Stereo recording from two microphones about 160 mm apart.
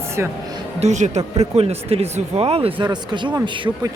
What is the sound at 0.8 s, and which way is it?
Speech, 45° right (ahead or behind).